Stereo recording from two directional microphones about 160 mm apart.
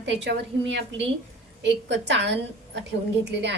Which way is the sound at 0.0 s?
90° right.